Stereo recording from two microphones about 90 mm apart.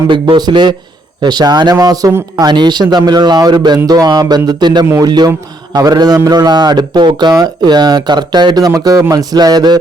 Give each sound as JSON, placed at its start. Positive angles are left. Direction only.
{"t": 0.1, "sound": "a man's voice", "side_deg": -55}